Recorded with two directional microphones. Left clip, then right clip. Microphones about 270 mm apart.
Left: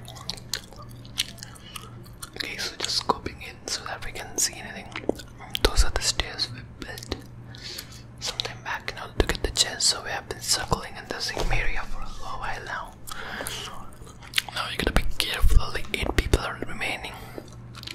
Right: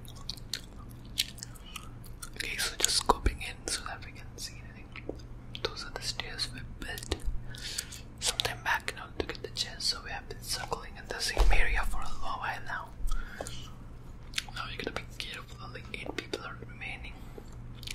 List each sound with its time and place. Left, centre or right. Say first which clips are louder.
0.3 s drip: left 6 dB; centre
1.1 s biting: left 4 dB; centre
2.4 s whispering: left 1 dB; centre
6.3 s whispering: left 6 dB; centre
8.9 s whispering: left 10 dB; centre